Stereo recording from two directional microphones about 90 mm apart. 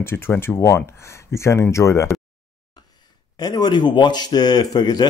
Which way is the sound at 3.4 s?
50° left (ahead or behind).